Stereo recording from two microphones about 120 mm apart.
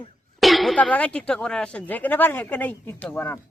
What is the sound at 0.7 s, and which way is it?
Speech, 10° left (ahead or behind).